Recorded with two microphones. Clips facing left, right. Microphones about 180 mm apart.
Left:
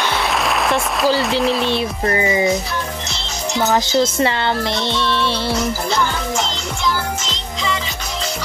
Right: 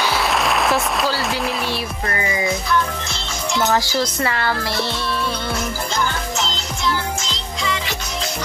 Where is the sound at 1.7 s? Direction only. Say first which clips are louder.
Left 6 dB; 25° left (ahead or behind).